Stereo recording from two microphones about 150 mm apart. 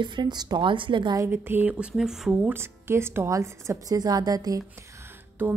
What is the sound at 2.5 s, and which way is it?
Speech, 15° right (ahead or behind).